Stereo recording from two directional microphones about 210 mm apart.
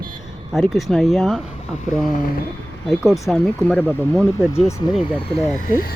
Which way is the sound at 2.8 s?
Centre (ahead or behind).